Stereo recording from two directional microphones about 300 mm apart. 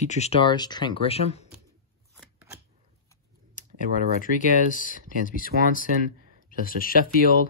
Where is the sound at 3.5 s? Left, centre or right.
Left.